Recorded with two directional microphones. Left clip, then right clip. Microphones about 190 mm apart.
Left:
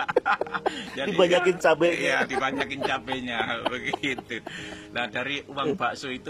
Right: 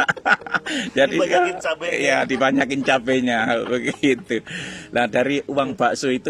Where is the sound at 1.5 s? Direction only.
40° left (ahead or behind).